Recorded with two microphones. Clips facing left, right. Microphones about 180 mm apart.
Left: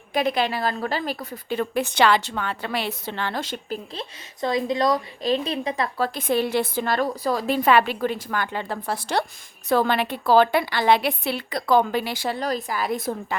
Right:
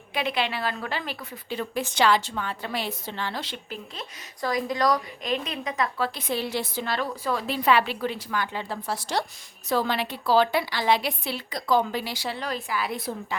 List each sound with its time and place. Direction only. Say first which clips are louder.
0.1 s a woman's voice: left 5 dB; 45° left (ahead or behind)
1.5 s a woman's voice: left 4 dB; 60° left (ahead or behind)
3.9 s a woman's voice: left 5 dB; 25° left (ahead or behind)
6.1 s a woman's voice: left 6 dB; 50° left (ahead or behind)